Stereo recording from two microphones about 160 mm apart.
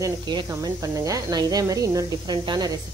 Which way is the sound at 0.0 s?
30° right (ahead or behind).